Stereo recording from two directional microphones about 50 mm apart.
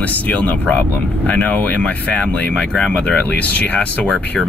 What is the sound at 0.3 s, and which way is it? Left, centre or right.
Speech, left.